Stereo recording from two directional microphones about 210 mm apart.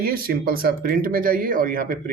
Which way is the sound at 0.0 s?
45° right (ahead or behind).